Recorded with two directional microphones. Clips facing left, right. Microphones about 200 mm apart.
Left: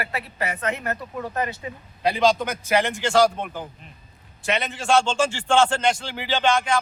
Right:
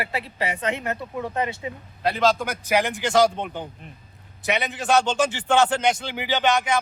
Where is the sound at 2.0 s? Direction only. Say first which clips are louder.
Left 1 dB; centre (ahead or behind).